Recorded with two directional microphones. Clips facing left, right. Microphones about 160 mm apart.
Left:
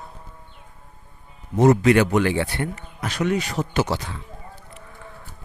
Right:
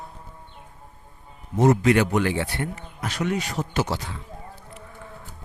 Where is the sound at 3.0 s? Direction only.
80° left.